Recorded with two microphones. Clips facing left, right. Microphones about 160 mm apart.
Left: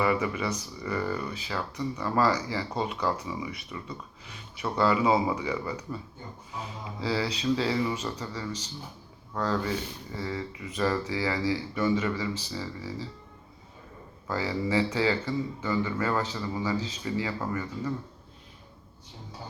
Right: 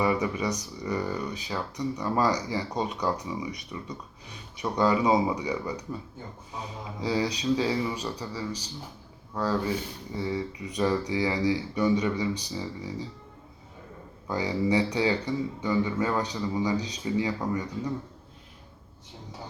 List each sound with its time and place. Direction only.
0.4 s speech: 15° right (ahead or behind)
7.0 s speech: 15° right (ahead or behind)
14.3 s speech: 15° right (ahead or behind)